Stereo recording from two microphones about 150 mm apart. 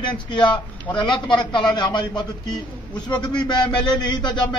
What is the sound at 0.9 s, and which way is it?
Speech, 20° left (ahead or behind).